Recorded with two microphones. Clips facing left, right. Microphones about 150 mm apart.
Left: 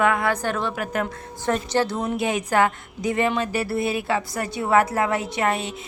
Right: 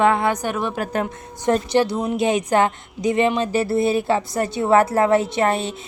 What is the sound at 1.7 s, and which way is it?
A woman's voice, 10° right (ahead or behind).